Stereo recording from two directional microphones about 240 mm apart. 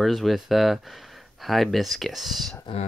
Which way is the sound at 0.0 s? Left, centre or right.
Centre.